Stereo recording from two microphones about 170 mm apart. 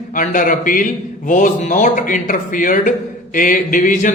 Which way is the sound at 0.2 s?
50° left (ahead or behind).